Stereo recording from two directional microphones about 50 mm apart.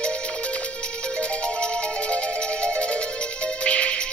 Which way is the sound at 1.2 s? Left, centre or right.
Left.